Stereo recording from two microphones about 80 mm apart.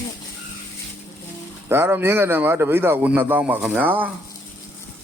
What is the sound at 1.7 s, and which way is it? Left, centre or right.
A man's voice, right.